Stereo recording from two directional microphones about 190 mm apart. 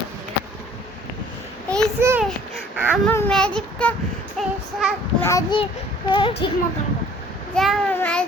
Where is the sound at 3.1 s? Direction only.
10° left (ahead or behind).